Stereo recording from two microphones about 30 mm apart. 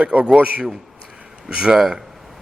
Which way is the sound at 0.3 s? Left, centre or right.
Right.